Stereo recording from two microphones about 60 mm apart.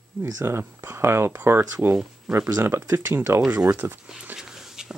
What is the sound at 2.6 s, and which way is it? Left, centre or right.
Speech, right.